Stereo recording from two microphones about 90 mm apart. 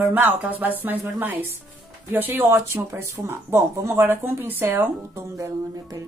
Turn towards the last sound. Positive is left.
turn(degrees=-40)  # may be behind; listen again after turning